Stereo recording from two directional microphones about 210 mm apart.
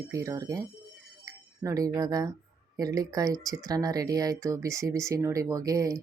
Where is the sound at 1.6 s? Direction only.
15° right (ahead or behind).